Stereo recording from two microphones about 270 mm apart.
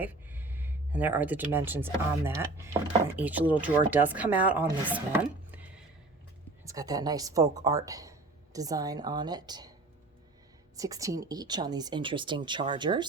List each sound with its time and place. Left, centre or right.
0.0 s speech: centre
4.9 s chopping: centre
6.7 s speech: centre
10.8 s speech: centre